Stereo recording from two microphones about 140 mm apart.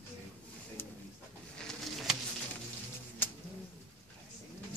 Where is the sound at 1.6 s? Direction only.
Centre (ahead or behind).